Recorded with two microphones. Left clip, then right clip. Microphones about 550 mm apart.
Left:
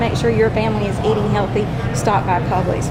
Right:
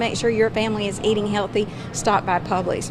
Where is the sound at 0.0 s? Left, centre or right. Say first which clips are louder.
Left 3 dB; right.